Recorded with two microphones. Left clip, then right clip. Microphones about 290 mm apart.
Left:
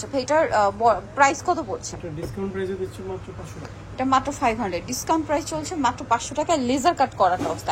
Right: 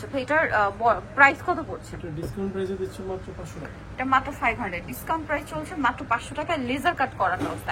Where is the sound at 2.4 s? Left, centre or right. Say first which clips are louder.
Left 1 dB; centre.